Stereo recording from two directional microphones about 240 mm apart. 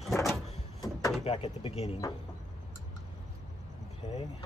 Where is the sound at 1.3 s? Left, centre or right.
Left.